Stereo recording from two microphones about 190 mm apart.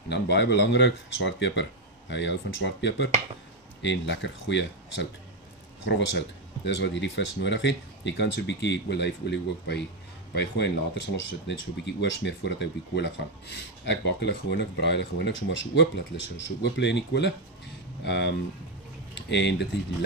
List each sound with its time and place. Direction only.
0.1 s speech: 65° left (ahead or behind)